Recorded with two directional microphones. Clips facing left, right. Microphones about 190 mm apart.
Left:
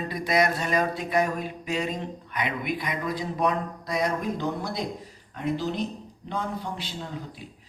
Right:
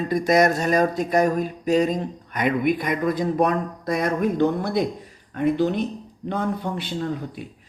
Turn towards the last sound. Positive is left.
turn(degrees=-60)  # may be behind; listen again after turning